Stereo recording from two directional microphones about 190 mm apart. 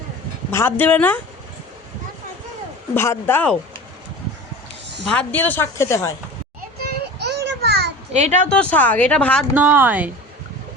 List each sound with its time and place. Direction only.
0.5 s speech: 10° left (ahead or behind)
2.9 s speech: 10° left (ahead or behind)
5.0 s speech: 5° left (ahead or behind)
6.7 s children playing: 55° right (ahead or behind)
8.1 s a woman's voice: 35° right (ahead or behind)
8.4 s speech: 5° left (ahead or behind)
9.6 s speech: 10° right (ahead or behind)